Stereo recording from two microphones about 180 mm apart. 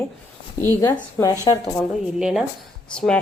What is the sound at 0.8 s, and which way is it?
Speech, 20° left (ahead or behind).